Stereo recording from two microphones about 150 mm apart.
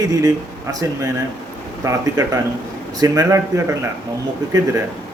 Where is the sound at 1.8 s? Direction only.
20° right (ahead or behind).